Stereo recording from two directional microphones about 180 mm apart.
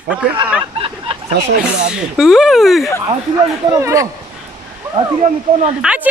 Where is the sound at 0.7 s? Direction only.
30° right (ahead or behind).